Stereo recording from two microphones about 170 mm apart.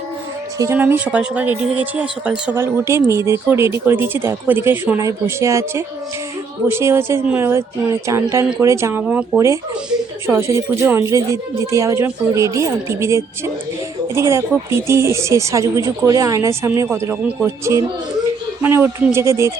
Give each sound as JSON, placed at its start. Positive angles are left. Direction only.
{"t": 0.6, "sound": "speech", "side_deg": -15}